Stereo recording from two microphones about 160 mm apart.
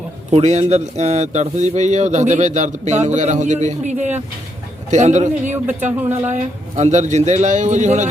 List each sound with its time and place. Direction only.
0.3 s a man's voice: 45° right (ahead or behind)
5.5 s speech: 10° right (ahead or behind)
6.3 s a man's voice: 45° right (ahead or behind)